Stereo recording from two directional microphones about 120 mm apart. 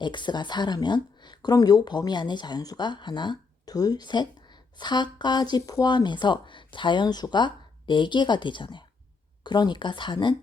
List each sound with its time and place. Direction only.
0.0 s speech: 40° left (ahead or behind)